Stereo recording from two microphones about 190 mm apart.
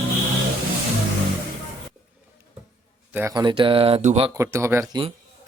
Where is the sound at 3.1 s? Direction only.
10° right (ahead or behind).